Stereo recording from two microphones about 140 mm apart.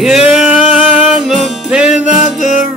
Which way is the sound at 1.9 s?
55° left (ahead or behind).